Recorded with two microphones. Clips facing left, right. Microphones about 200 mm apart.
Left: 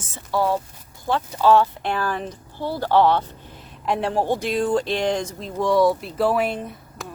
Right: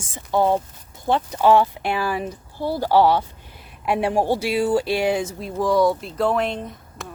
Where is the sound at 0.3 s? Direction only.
20° right (ahead or behind).